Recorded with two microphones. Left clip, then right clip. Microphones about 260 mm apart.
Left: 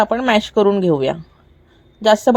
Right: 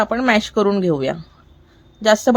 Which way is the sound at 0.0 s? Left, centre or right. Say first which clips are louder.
Left 1 dB; centre.